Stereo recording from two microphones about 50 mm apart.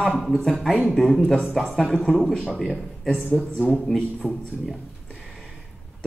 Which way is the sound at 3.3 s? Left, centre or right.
Centre.